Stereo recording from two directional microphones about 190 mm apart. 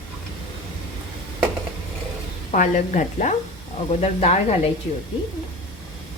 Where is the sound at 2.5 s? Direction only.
40° left (ahead or behind).